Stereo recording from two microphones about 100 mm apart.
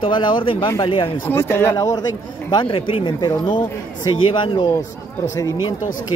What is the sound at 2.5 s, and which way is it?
Speech, 60° left (ahead or behind).